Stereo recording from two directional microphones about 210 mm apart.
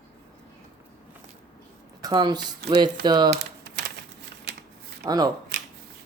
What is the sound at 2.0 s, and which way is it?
Speech, 20° right (ahead or behind).